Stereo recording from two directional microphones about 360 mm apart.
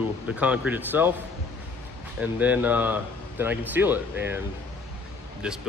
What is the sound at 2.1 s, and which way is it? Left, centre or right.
Speech, centre.